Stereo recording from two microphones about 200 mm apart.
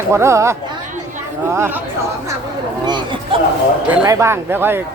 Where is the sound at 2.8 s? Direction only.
20° right (ahead or behind).